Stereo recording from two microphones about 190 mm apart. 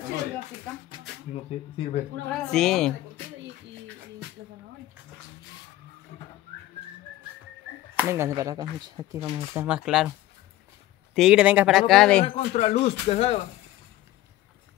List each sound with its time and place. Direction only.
1.3 s speech: 35° left (ahead or behind)
2.2 s speech: 5° left (ahead or behind)
7.9 s speech: 10° right (ahead or behind)
9.6 s speech: 5° right (ahead or behind)
11.1 s speech: 5° right (ahead or behind)
12.3 s speech: 30° left (ahead or behind)